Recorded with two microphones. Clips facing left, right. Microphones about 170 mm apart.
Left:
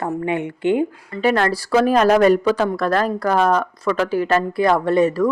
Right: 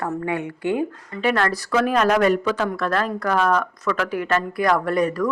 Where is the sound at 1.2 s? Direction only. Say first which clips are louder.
Left 3 dB; 40° left (ahead or behind).